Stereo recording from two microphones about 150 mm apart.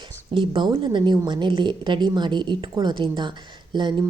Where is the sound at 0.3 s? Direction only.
35° right (ahead or behind).